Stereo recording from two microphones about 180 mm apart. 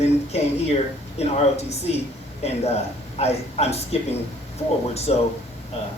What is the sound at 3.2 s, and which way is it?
Speech, 35° left (ahead or behind).